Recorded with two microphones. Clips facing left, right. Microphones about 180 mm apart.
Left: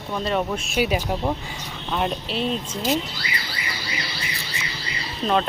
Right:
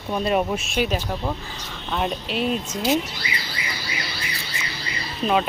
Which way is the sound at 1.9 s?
Centre (ahead or behind).